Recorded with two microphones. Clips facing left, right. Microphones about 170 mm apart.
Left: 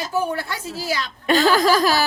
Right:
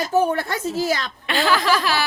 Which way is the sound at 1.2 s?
40° left (ahead or behind).